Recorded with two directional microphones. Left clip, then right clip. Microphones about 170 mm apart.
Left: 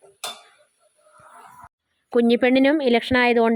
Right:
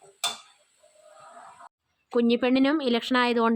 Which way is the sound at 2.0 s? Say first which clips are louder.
Left 6 dB; 25° left (ahead or behind).